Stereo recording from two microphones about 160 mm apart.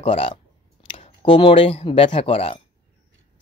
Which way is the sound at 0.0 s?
35° left (ahead or behind).